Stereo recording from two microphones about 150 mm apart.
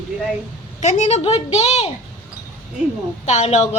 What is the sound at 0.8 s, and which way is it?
A woman's voice, 50° left (ahead or behind).